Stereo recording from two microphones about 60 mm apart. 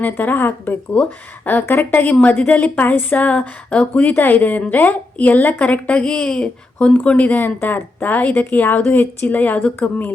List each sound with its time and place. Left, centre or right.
0.0 s a woman's voice: left